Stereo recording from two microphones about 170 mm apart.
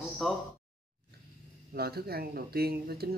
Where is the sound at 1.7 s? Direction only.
70° right (ahead or behind).